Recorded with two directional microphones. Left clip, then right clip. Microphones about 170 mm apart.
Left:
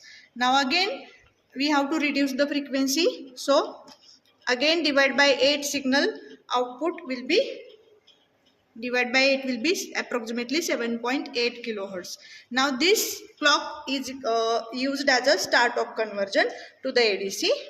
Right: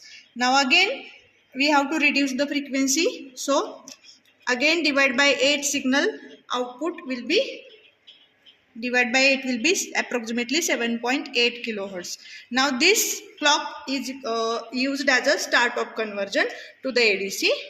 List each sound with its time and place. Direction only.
0.0 s a sound: 35° right (ahead or behind)
1.5 s a woman's voice: 40° right (ahead or behind)
8.8 s a woman's voice: 45° right (ahead or behind)